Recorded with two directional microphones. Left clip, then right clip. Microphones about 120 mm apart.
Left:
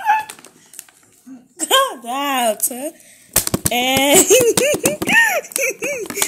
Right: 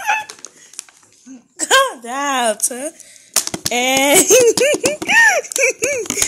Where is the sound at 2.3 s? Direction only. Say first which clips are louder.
Right 1 dB; 5° left (ahead or behind).